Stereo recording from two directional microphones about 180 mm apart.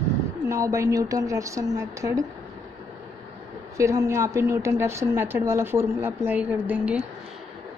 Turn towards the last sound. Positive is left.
turn(degrees=-10)  # may be behind; listen again after turning